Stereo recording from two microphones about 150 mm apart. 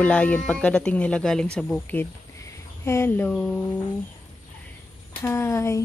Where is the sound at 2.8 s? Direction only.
15° left (ahead or behind).